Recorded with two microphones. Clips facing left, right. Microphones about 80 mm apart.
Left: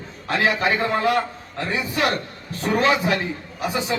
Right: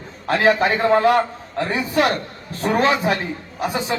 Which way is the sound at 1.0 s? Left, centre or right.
Right.